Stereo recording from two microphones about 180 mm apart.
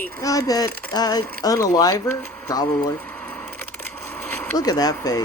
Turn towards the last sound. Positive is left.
turn(degrees=20)  # may be behind; listen again after turning